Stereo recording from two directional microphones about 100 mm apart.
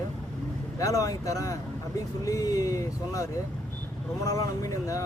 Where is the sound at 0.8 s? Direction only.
35° left (ahead or behind).